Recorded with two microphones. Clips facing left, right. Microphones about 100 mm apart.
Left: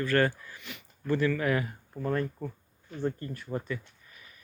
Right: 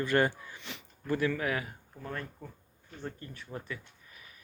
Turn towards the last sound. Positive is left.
turn(degrees=20)  # may be behind; listen again after turning